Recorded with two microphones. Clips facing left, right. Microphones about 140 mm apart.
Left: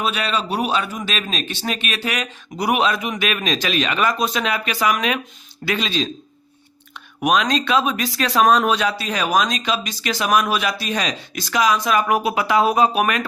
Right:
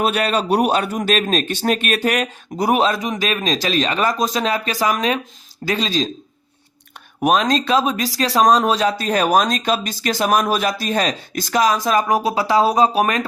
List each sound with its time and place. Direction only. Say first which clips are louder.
0.0 s a man's voice: right 4 dB; 50° right (ahead or behind)
7.2 s a man's voice: right 2 dB; 40° right (ahead or behind)